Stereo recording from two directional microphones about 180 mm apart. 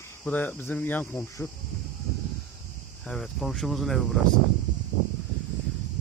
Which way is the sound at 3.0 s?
Centre (ahead or behind).